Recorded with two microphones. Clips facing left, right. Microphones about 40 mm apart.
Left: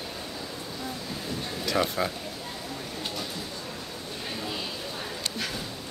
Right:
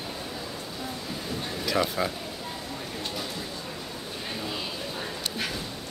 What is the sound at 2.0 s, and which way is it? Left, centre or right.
Speech, centre.